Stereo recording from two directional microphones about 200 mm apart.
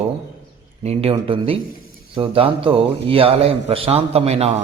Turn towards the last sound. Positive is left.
turn(degrees=-30)  # may be behind; listen again after turning